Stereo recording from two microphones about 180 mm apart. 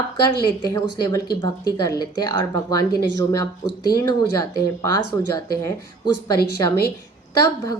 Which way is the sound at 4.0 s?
20° left (ahead or behind).